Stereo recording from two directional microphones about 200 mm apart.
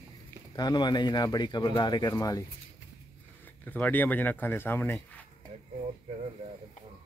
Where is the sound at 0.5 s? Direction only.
20° left (ahead or behind).